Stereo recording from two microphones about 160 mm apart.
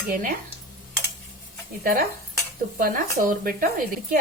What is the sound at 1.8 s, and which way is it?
Dishes, 65° right (ahead or behind).